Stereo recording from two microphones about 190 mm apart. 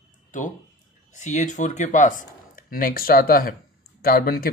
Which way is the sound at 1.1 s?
40° left (ahead or behind).